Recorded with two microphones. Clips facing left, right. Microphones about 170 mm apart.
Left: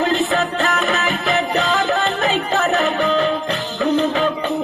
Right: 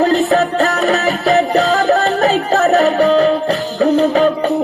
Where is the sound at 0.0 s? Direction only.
40° right (ahead or behind).